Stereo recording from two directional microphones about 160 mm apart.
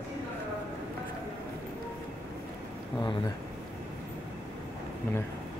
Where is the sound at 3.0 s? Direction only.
25° left (ahead or behind).